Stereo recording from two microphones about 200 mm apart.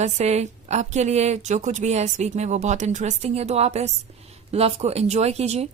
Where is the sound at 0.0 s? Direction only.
35° right (ahead or behind).